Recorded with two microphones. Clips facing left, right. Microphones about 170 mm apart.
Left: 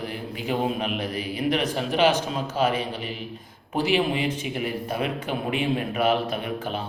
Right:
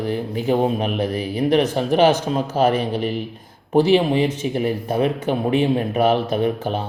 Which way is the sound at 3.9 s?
35° right (ahead or behind).